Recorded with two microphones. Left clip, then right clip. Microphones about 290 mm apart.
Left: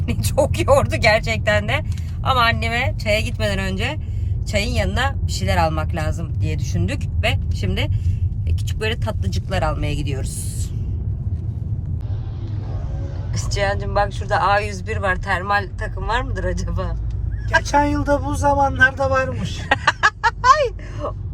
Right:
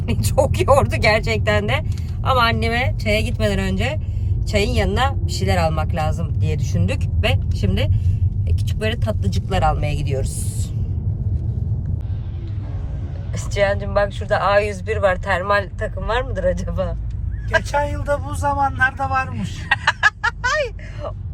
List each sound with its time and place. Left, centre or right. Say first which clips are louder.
0.0 s speech: right 1 dB; centre
13.3 s speech: right 3 dB; centre
17.7 s speech: left 4 dB; left
19.3 s a sound: left 1 dB; left